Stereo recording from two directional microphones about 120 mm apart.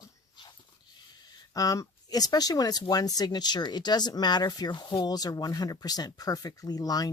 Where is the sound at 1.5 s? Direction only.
30° left (ahead or behind).